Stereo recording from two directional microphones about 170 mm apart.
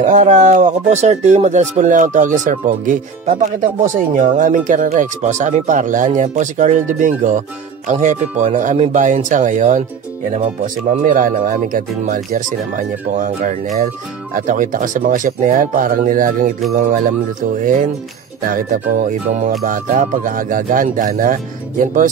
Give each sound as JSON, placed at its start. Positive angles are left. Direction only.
{"t": 0.1, "sound": "speech", "side_deg": -45}